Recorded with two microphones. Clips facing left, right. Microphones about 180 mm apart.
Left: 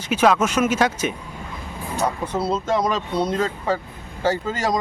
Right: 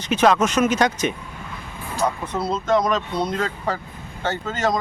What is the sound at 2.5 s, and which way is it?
Speech, 10° left (ahead or behind).